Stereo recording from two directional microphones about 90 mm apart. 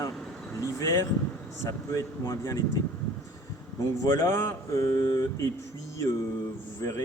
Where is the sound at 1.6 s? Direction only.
35° left (ahead or behind).